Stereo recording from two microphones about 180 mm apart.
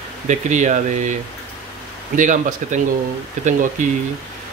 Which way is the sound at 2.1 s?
45° right (ahead or behind).